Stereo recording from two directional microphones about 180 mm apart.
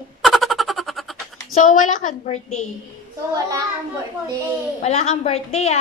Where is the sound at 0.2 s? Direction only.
Centre (ahead or behind).